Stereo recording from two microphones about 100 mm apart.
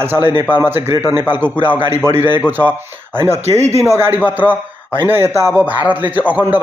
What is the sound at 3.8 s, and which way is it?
A man's voice, 25° right (ahead or behind).